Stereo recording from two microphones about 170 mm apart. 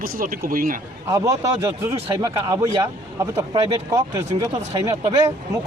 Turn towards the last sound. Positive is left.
turn(degrees=-20)  # may be behind; listen again after turning